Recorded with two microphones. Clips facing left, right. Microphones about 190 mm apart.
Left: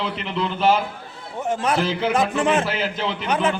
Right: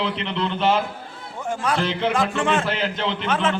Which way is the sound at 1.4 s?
20° left (ahead or behind).